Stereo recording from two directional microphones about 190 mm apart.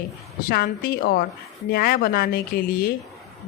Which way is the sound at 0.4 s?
50° left (ahead or behind).